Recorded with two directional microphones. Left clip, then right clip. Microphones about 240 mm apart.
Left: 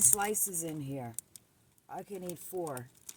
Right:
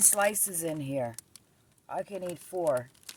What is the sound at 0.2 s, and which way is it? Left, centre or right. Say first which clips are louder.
Speech: right 6 dB; centre.